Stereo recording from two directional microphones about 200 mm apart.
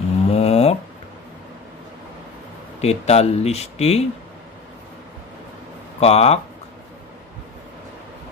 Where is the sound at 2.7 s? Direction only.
30° left (ahead or behind).